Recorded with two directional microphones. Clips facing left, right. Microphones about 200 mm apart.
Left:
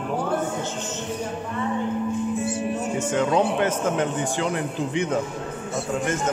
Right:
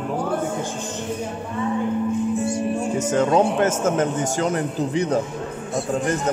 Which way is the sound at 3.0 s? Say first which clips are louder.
Right 3 dB; 40° right (ahead or behind).